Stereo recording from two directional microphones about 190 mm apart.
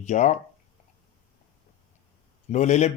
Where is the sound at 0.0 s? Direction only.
40° left (ahead or behind).